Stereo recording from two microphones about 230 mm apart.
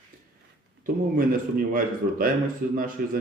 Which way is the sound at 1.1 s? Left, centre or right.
Right.